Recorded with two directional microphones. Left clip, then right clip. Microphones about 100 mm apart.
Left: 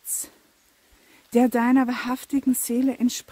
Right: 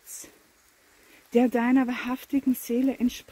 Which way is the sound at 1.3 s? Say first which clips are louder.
Left 3 dB; 55° left (ahead or behind).